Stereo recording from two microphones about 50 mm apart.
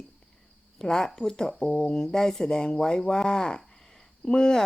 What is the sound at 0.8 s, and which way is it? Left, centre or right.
Speech, centre.